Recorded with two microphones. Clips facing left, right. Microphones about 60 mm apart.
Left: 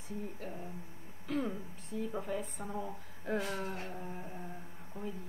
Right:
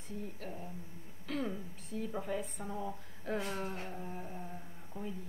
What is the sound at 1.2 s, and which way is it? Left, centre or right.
Speech, centre.